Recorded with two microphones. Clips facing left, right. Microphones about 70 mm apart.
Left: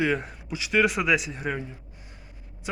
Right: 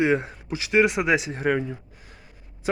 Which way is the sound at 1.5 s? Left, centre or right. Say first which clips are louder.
Right 8 dB; right.